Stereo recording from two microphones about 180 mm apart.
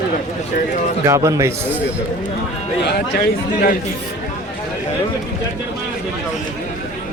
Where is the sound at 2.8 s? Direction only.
60° left (ahead or behind).